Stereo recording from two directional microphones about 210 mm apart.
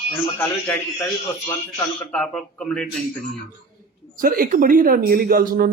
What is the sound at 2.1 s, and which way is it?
Speech, 5° left (ahead or behind).